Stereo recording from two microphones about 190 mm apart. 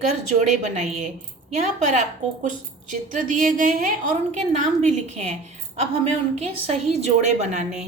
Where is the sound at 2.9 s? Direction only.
40° right (ahead or behind).